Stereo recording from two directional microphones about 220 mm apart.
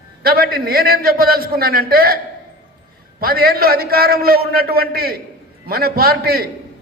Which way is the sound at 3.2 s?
45° right (ahead or behind).